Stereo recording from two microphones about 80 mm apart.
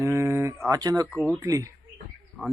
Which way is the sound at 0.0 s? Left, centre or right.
Right.